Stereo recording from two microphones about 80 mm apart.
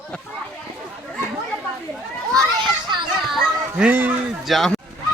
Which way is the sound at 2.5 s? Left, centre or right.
Right.